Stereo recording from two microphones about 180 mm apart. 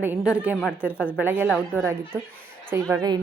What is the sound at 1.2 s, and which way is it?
A woman's voice, 10° right (ahead or behind).